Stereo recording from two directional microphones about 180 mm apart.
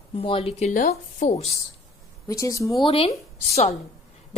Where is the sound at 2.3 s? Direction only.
20° left (ahead or behind).